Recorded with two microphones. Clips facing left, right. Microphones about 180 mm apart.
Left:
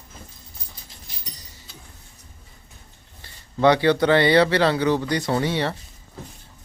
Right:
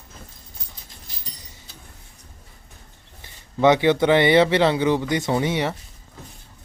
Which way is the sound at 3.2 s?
20° right (ahead or behind).